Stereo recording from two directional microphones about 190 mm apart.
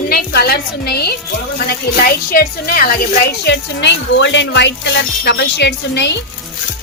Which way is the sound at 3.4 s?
65° left (ahead or behind).